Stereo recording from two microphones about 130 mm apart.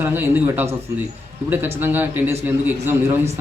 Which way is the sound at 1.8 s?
15° right (ahead or behind).